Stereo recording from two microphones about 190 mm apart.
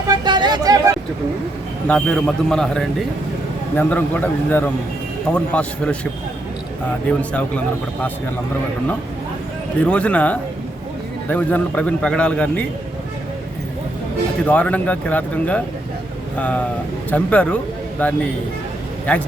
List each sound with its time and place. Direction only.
0.1 s vehicle: 25° right (ahead or behind)
1.9 s a man's voice: centre (ahead or behind)
7.1 s a man's voice: 5° left (ahead or behind)
9.8 s a man's voice: 5° left (ahead or behind)
14.4 s a man's voice: 5° left (ahead or behind)